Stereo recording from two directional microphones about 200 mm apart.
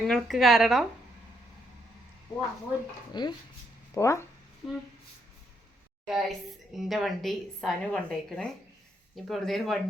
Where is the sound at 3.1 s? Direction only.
20° left (ahead or behind).